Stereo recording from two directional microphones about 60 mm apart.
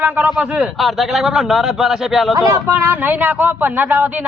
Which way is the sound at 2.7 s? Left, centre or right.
Right.